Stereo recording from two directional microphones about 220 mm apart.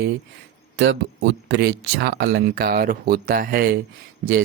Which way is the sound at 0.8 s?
50° right (ahead or behind).